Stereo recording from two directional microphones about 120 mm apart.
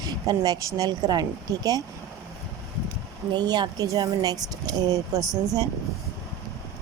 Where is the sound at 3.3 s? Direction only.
35° right (ahead or behind).